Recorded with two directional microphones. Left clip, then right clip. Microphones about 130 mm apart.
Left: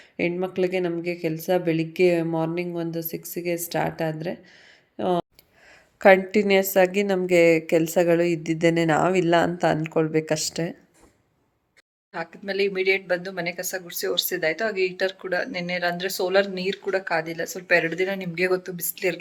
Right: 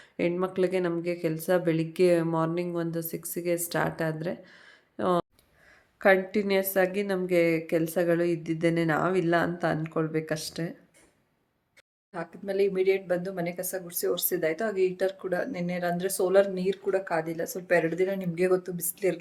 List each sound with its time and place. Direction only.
0.0 s a woman's voice: 10° left (ahead or behind)
5.6 s a woman's voice: 30° left (ahead or behind)
12.1 s speech: 15° right (ahead or behind)